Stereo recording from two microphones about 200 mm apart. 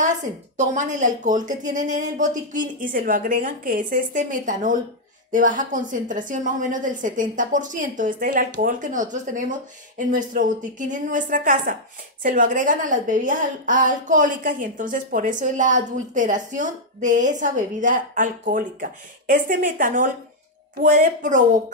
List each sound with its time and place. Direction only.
0.6 s a woman's voice: 35° right (ahead or behind)